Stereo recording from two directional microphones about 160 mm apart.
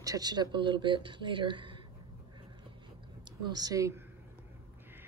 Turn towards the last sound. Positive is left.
turn(degrees=-15)  # may be behind; listen again after turning